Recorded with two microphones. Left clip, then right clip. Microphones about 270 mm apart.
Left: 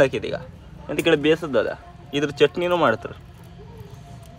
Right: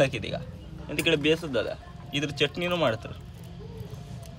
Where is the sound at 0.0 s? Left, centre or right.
Centre.